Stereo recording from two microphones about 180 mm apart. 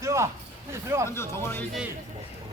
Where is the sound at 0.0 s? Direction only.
15° right (ahead or behind).